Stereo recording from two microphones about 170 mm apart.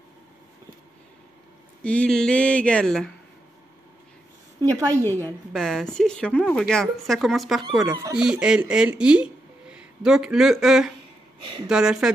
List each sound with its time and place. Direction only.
1.8 s speech: 5° left (ahead or behind)
4.7 s speech: 20° right (ahead or behind)
5.5 s speech: centre (ahead or behind)
7.8 s speech: 20° right (ahead or behind)
8.2 s speech: 5° right (ahead or behind)